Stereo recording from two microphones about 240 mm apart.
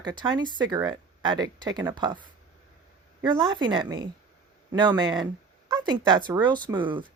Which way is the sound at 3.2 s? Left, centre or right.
Centre.